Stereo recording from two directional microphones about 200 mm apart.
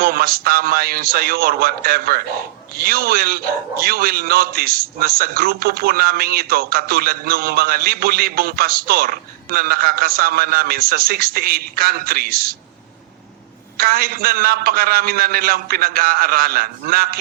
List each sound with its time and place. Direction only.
0.0 s a man's voice: 50° right (ahead or behind)
13.7 s a man's voice: 50° right (ahead or behind)